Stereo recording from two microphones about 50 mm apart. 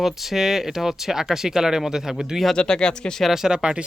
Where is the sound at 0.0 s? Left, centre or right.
Centre.